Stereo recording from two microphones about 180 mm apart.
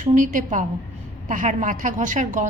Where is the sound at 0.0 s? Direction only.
45° right (ahead or behind).